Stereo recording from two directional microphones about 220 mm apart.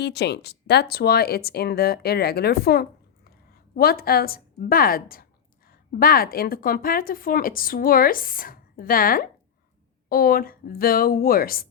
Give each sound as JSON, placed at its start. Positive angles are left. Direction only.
{"t": 0.0, "sound": "a woman's voice", "side_deg": 50}